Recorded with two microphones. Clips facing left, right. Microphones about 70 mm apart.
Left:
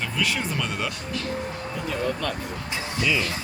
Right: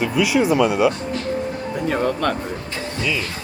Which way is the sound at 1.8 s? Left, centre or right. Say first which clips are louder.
Right 7 dB; right.